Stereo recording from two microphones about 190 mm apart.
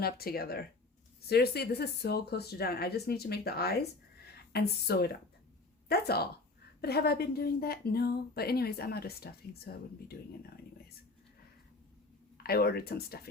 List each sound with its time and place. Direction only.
0.0 s a woman's voice: 55° left (ahead or behind)
12.4 s speech: 55° left (ahead or behind)